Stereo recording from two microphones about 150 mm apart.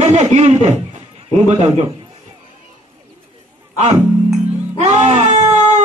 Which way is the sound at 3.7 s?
45° right (ahead or behind).